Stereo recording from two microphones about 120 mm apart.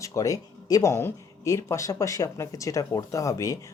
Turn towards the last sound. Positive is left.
turn(degrees=25)  # may be behind; listen again after turning